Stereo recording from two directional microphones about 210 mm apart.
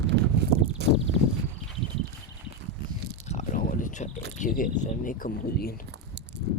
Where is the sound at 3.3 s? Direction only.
35° left (ahead or behind).